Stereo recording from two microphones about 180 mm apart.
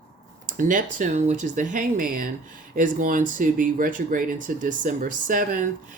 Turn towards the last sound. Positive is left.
turn(degrees=-50)  # may be behind; listen again after turning